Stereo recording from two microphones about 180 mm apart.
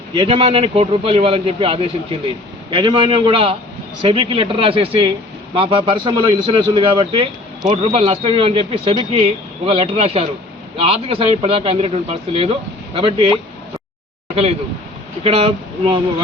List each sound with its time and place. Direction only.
0.2 s a man's voice: 30° right (ahead or behind)
15.2 s a man's voice: 30° right (ahead or behind)